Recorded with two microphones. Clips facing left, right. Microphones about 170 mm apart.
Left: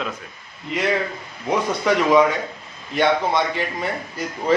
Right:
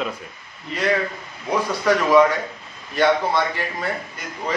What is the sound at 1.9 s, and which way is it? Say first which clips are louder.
Speech: right 1 dB; 20° left (ahead or behind).